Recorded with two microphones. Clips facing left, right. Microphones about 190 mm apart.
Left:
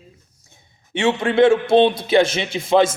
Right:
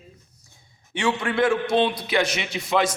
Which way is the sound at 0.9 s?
25° left (ahead or behind).